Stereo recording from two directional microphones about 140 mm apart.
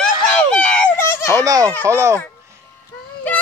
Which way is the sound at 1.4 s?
25° right (ahead or behind).